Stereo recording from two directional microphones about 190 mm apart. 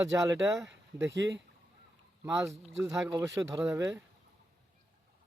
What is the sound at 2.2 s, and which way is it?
A man's voice, 15° right (ahead or behind).